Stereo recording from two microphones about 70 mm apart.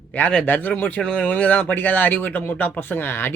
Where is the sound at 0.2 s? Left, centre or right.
Centre.